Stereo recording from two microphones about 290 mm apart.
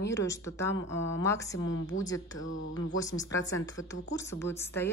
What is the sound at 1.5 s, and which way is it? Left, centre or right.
Speech, left.